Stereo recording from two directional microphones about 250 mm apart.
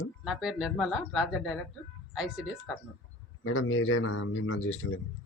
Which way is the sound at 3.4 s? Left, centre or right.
Left.